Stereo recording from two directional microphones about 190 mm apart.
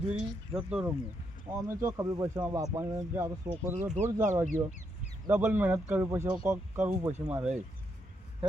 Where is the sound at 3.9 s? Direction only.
40° right (ahead or behind).